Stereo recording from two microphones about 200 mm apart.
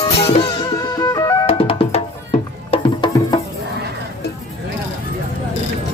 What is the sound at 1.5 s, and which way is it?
Music, 30° left (ahead or behind).